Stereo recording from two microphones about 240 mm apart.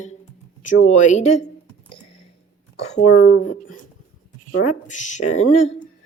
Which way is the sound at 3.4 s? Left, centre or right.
Left.